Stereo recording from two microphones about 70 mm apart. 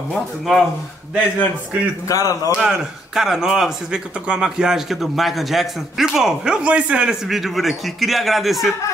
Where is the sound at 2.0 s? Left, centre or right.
Left.